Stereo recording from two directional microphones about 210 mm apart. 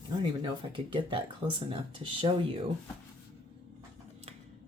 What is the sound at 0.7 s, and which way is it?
Speech, 25° right (ahead or behind).